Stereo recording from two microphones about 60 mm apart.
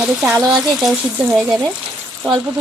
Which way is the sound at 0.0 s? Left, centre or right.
Centre.